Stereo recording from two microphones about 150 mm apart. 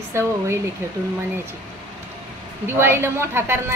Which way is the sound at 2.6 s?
15° right (ahead or behind).